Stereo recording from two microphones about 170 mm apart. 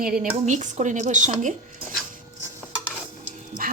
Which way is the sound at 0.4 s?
45° right (ahead or behind).